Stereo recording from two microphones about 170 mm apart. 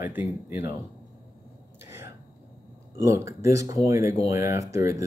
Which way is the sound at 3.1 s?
20° right (ahead or behind).